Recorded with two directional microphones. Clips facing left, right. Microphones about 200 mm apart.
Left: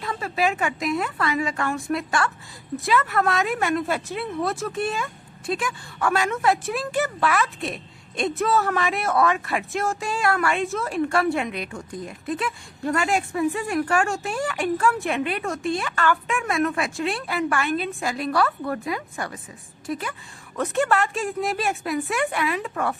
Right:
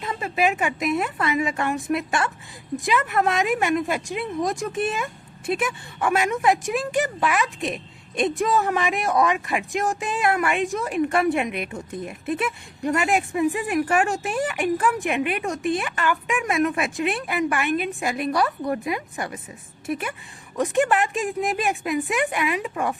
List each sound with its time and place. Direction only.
0.0 s a woman's voice: 20° right (ahead or behind)